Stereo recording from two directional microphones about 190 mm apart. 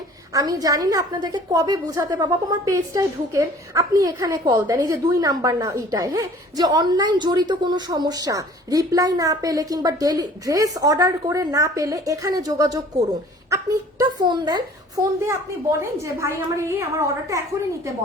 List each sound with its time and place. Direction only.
0.3 s a woman's voice: 20° right (ahead or behind)